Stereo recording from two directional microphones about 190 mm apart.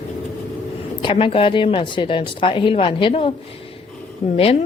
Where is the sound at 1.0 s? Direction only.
30° left (ahead or behind).